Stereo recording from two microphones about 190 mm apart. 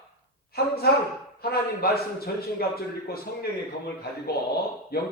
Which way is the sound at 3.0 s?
55° left (ahead or behind).